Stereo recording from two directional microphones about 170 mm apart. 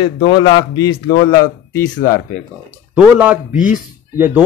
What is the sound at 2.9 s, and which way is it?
Speech, 10° right (ahead or behind).